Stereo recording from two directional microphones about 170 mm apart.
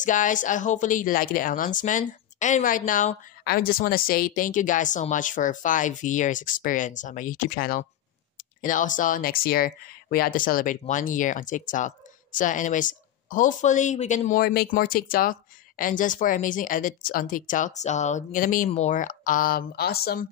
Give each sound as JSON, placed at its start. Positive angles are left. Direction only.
{"t": 0.0, "sound": "speech", "side_deg": 50}
{"t": 3.4, "sound": "speech", "side_deg": 60}